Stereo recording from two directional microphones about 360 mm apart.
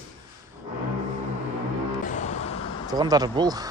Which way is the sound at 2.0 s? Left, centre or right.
Left.